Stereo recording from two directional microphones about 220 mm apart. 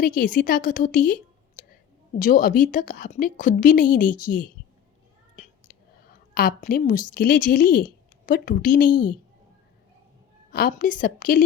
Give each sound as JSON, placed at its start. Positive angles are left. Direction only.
{"t": 0.0, "sound": "a woman's voice", "side_deg": 40}
{"t": 5.7, "sound": "a sound", "side_deg": 40}
{"t": 6.3, "sound": "a woman's voice", "side_deg": 40}
{"t": 8.9, "sound": "a woman's voice", "side_deg": 20}
{"t": 10.5, "sound": "a woman's voice", "side_deg": 40}